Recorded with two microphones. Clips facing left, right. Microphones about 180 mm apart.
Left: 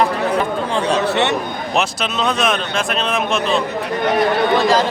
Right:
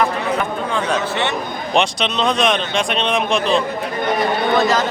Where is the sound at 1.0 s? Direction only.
70° left (ahead or behind).